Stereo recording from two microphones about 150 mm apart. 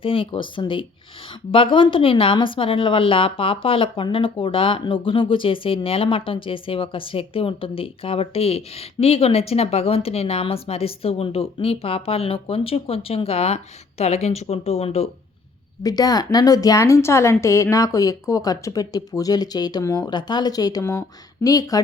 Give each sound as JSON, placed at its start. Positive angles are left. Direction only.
{"t": 0.0, "sound": "a woman's voice", "side_deg": 35}
{"t": 15.8, "sound": "speech", "side_deg": 25}